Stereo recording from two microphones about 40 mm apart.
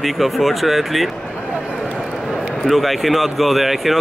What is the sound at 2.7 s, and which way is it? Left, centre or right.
Speech, centre.